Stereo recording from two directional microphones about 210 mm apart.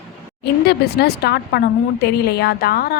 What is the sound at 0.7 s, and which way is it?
A woman's voice, 50° left (ahead or behind).